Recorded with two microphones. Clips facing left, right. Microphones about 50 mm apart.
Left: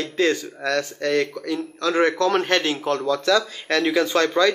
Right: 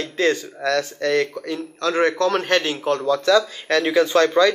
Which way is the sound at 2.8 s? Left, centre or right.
Right.